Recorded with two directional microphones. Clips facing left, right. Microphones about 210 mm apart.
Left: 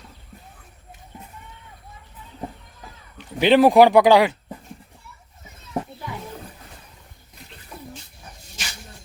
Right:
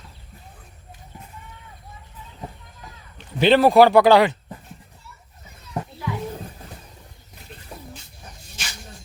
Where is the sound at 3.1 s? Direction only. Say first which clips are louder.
Left 1 dB; 15° left (ahead or behind).